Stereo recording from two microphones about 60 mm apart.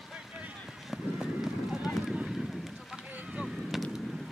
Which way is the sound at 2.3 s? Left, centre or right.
Centre.